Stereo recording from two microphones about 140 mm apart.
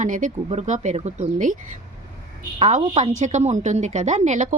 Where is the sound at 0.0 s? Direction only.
65° right (ahead or behind).